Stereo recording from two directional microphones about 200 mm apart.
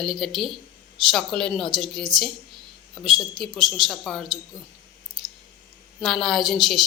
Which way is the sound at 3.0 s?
Centre (ahead or behind).